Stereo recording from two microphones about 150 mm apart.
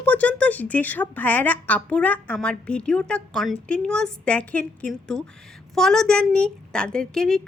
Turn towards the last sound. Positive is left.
turn(degrees=5)  # may be behind; listen again after turning